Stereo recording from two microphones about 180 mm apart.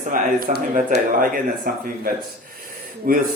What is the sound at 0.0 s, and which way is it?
Speech, 50° right (ahead or behind).